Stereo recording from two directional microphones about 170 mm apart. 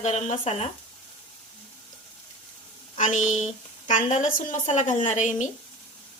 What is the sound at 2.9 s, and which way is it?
Speech, 45° left (ahead or behind).